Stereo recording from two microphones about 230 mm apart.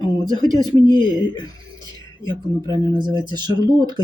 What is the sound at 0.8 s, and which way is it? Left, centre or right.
Speech, centre.